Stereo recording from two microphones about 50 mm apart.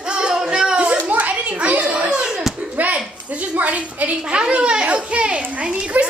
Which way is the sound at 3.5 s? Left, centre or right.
Right.